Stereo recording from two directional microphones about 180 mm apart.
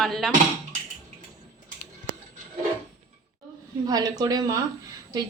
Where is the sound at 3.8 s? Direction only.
20° right (ahead or behind).